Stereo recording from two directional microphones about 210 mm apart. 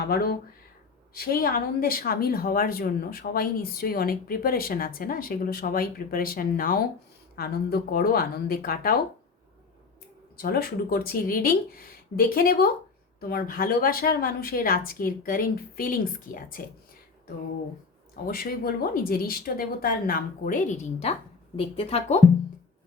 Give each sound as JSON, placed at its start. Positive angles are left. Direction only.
{"t": 0.1, "sound": "speech", "side_deg": 45}
{"t": 10.3, "sound": "speech", "side_deg": 45}
{"t": 18.3, "sound": "speech", "side_deg": 45}